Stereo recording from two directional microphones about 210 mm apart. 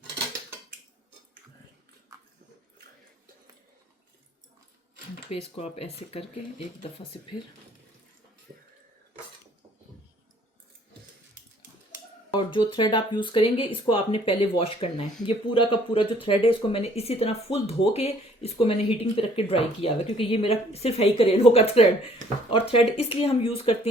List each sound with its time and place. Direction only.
5.3 s speech: 30° left (ahead or behind)
12.3 s speech: 20° left (ahead or behind)